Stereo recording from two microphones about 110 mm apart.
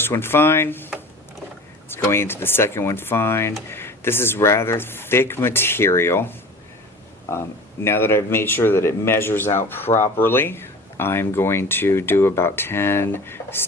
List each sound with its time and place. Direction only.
0.0 s speech: 20° left (ahead or behind)
1.9 s speech: 20° left (ahead or behind)
7.9 s speech: 20° left (ahead or behind)